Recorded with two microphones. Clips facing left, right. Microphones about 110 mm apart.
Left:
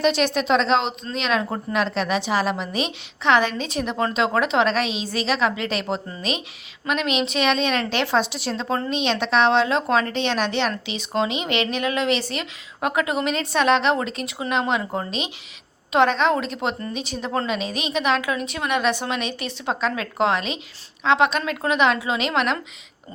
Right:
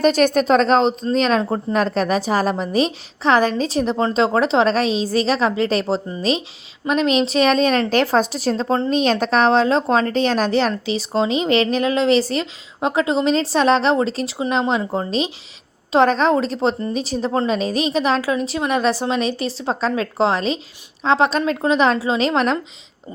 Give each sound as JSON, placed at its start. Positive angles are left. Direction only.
{"t": 0.0, "sound": "a woman's voice", "side_deg": -45}
{"t": 1.7, "sound": "a woman's voice", "side_deg": -40}
{"t": 6.8, "sound": "a woman's voice", "side_deg": -35}
{"t": 8.6, "sound": "speech", "side_deg": -25}
{"t": 8.9, "sound": "a woman's voice", "side_deg": -40}